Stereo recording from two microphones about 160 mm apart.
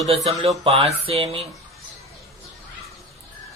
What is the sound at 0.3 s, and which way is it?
Mantra, 40° right (ahead or behind).